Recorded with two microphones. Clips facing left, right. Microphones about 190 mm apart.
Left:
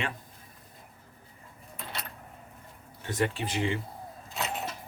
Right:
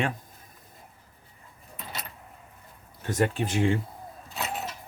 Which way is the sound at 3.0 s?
45° right (ahead or behind).